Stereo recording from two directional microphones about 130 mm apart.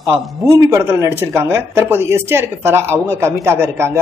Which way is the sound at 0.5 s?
25° right (ahead or behind).